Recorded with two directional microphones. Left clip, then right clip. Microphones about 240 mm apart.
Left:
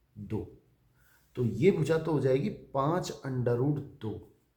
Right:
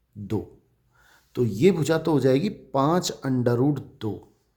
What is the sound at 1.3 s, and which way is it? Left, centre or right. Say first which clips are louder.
Speech: right 6 dB; right.